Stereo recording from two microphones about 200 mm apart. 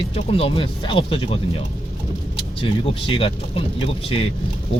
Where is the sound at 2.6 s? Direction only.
25° left (ahead or behind).